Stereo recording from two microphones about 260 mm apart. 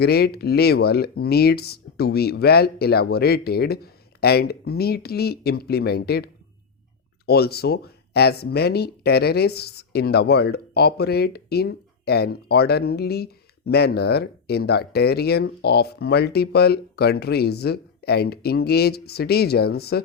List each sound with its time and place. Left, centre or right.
0.0 s speech: left